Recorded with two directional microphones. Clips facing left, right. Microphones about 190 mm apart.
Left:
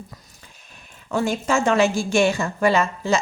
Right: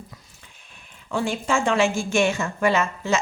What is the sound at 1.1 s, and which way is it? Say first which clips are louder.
A woman's voice: left 2 dB; 40° left (ahead or behind).